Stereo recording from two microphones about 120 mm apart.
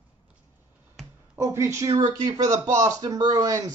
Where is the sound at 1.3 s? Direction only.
20° right (ahead or behind).